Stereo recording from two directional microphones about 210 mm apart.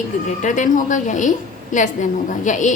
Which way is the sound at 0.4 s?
35° left (ahead or behind).